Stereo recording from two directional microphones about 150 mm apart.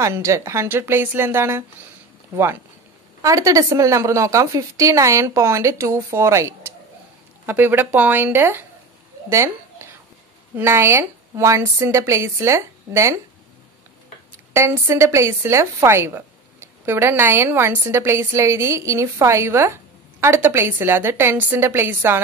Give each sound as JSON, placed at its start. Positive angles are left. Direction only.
{"t": 0.0, "sound": "a woman's voice", "side_deg": -20}
{"t": 14.5, "sound": "a woman's voice", "side_deg": -20}